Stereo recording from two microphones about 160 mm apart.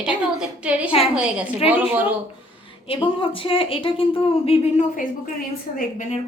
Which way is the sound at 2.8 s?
35° left (ahead or behind).